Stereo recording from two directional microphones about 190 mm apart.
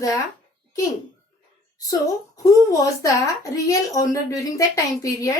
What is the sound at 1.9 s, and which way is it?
Speech, 20° left (ahead or behind).